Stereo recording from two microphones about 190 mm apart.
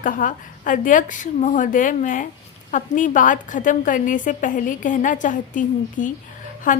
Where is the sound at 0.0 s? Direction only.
45° left (ahead or behind).